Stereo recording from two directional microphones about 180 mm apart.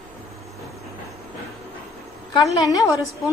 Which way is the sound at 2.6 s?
20° left (ahead or behind).